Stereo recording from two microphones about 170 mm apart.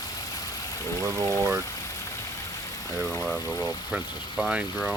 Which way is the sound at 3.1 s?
5° left (ahead or behind).